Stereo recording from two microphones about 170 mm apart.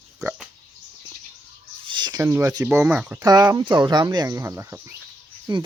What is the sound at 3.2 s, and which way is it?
Speech, 25° right (ahead or behind).